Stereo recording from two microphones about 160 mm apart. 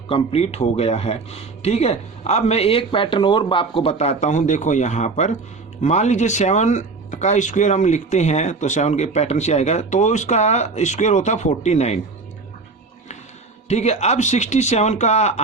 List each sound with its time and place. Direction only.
0.1 s speech: 40° left (ahead or behind)
13.7 s speech: 45° left (ahead or behind)